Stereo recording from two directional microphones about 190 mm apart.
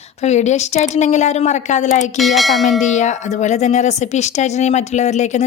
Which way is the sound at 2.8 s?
40° left (ahead or behind).